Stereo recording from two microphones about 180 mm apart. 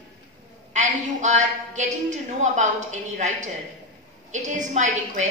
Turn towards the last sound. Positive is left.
turn(degrees=-40)  # may be behind; listen again after turning